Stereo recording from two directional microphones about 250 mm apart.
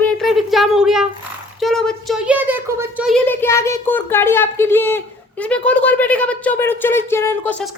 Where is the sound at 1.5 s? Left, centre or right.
Centre.